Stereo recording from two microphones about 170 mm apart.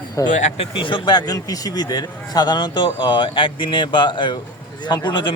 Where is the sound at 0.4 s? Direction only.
30° left (ahead or behind).